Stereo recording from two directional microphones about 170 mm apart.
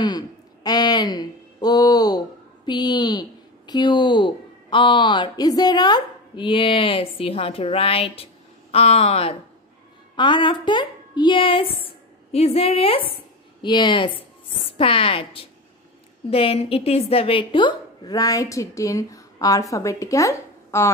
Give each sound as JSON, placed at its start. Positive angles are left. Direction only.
{"t": 0.7, "sound": "a woman's voice", "side_deg": 25}